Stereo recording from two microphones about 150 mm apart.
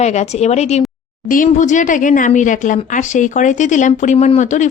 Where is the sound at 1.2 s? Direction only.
65° left (ahead or behind).